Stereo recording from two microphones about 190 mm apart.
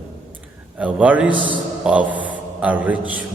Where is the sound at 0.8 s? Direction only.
5° right (ahead or behind).